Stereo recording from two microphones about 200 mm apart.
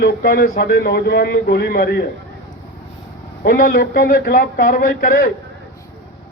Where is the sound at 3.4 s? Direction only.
50° left (ahead or behind).